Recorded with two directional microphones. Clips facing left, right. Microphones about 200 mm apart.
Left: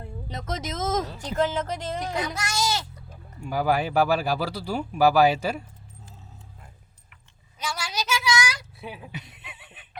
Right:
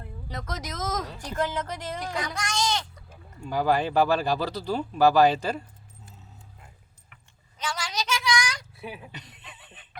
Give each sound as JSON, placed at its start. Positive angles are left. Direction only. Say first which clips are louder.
{"t": 0.0, "sound": "speech", "louder": "left 2 dB", "side_deg": 25}
{"t": 2.1, "sound": "speech", "louder": "left 2 dB", "side_deg": 5}
{"t": 7.6, "sound": "a sound", "louder": "even", "side_deg": 10}